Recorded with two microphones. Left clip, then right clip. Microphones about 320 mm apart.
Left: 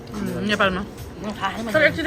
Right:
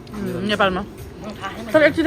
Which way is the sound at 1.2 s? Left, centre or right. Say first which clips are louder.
Left 4 dB; left.